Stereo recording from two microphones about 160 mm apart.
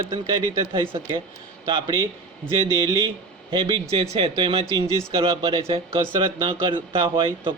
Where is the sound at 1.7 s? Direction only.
30° right (ahead or behind).